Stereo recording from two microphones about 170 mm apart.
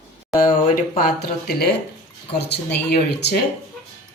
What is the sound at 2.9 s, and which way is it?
Speech, 80° left.